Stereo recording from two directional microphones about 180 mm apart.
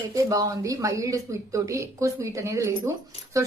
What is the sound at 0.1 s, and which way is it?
A woman's voice, 20° right (ahead or behind).